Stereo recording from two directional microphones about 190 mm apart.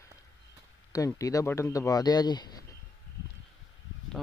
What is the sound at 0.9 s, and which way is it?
Speech, 15° left (ahead or behind).